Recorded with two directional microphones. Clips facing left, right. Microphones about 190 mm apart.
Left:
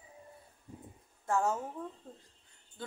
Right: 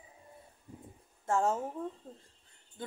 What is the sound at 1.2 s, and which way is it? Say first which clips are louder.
Speech: right 1 dB; 25° right (ahead or behind).